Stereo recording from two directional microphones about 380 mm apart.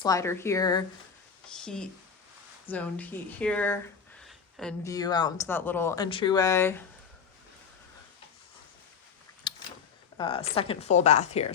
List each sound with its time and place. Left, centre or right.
0.0 s speech: centre
9.5 s a sound: centre
10.2 s speech: centre